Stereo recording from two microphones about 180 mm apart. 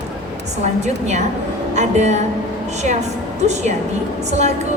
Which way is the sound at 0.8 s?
40° right (ahead or behind).